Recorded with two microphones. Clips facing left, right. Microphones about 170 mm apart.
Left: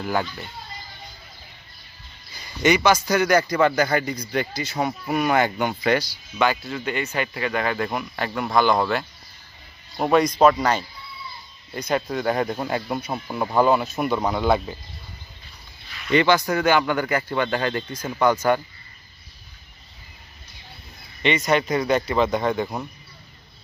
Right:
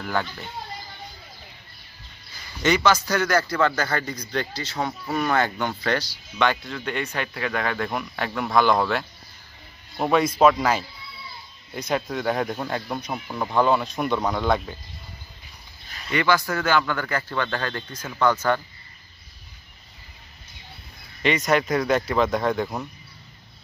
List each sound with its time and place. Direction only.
0.0 s a man's voice: 15° left (ahead or behind)
2.6 s a man's voice: 15° left (ahead or behind)
16.1 s a man's voice: 25° left (ahead or behind)
21.2 s speech: centre (ahead or behind)